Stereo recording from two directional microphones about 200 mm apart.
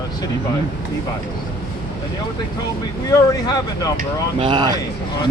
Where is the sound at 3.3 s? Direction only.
20° left (ahead or behind).